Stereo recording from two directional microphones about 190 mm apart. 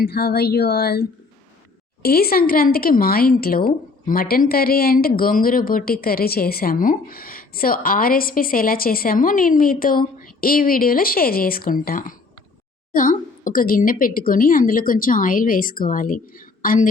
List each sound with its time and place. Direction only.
0.0 s speech: 55° left (ahead or behind)